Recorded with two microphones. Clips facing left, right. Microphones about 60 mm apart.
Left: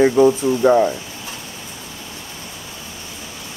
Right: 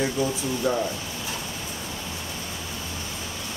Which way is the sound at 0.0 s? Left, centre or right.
Left.